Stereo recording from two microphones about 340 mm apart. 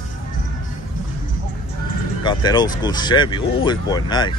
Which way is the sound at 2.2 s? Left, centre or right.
Centre.